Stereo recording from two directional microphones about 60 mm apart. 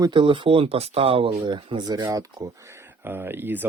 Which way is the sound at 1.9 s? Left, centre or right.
Right.